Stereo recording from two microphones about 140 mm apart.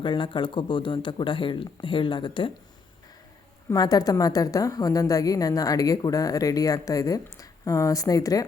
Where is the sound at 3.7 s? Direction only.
25° left (ahead or behind).